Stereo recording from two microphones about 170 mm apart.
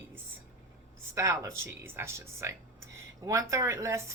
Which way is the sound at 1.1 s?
20° right (ahead or behind).